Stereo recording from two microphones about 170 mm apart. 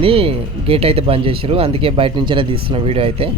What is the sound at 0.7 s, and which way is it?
Speech, 35° right (ahead or behind).